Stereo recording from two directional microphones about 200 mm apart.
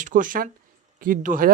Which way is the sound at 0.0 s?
40° right (ahead or behind).